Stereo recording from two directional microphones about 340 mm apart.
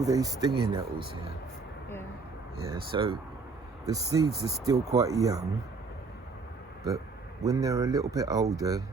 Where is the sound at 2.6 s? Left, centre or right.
Centre.